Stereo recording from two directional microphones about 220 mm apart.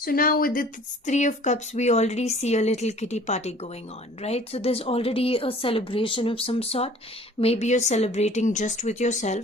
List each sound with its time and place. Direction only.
0.0 s speech: 40° left (ahead or behind)